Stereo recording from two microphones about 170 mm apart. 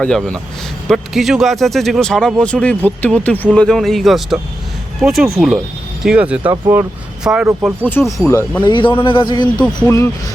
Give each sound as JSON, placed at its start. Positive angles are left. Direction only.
{"t": 0.0, "sound": "speech", "side_deg": 5}
{"t": 8.3, "sound": "speech", "side_deg": 15}
{"t": 8.7, "sound": "a man's voice", "side_deg": 30}